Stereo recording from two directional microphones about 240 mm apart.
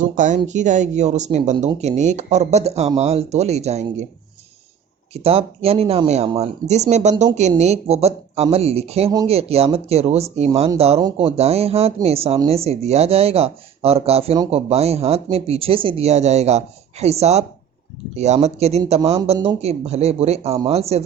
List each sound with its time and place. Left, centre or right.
0.0 s speech: right
5.1 s speech: right